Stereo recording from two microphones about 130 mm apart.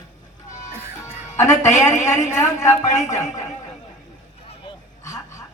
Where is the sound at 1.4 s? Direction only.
25° left (ahead or behind).